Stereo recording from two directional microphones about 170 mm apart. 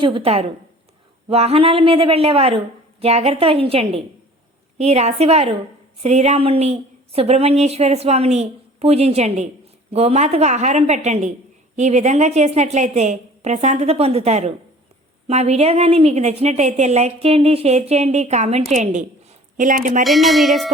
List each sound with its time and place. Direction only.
0.0 s a woman's voice: 30° right (ahead or behind); by 20.1 s 50° right (ahead or behind)
20.1 s speech: centre (ahead or behind)